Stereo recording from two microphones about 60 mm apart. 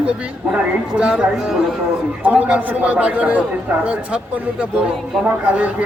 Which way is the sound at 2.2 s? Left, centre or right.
Right.